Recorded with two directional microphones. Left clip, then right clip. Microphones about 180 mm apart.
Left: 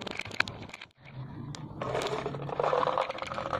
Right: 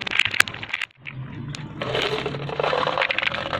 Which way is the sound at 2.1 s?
Centre (ahead or behind).